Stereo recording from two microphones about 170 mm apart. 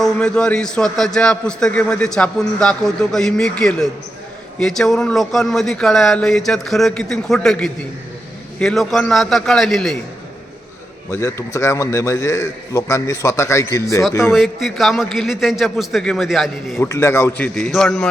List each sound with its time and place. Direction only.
0.0 s a man's voice: 5° left (ahead or behind)
11.1 s a man's voice: 15° left (ahead or behind)
14.3 s a man's voice: centre (ahead or behind)
16.7 s a man's voice: 15° left (ahead or behind)